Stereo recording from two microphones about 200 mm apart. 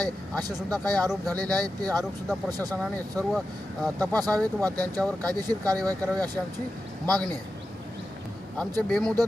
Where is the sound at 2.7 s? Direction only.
5° left (ahead or behind).